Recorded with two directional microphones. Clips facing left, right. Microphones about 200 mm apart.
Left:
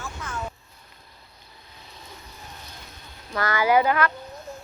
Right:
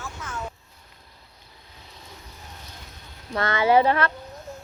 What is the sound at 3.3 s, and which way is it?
Speech, 25° right (ahead or behind).